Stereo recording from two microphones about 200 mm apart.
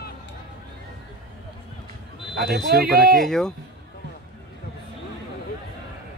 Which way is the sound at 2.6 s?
50° right (ahead or behind).